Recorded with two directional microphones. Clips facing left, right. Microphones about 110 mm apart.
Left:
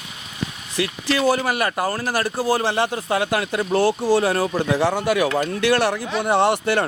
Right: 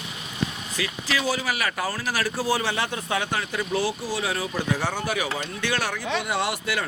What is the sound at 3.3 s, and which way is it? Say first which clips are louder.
Speech: left 6 dB; 65° left (ahead or behind).